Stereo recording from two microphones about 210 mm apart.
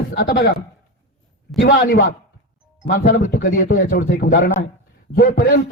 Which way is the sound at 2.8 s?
50° left (ahead or behind).